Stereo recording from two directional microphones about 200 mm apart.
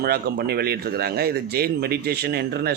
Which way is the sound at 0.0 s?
50° right (ahead or behind).